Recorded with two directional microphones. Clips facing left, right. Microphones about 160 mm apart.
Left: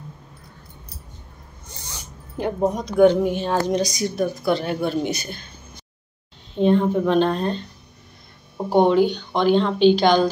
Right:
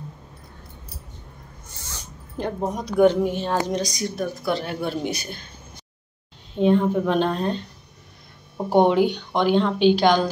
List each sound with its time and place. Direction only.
1.7 s dog: 20° left (ahead or behind)
2.3 s speech: 5° left (ahead or behind)
2.8 s speech: 5° right (ahead or behind)
6.5 s speech: 5° right (ahead or behind)
8.7 s a woman's voice: 15° right (ahead or behind)